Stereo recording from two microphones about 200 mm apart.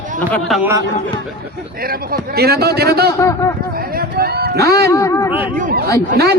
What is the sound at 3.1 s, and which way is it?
Speech, 15° left (ahead or behind).